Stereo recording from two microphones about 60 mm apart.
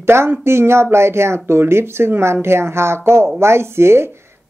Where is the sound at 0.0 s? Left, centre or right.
Right.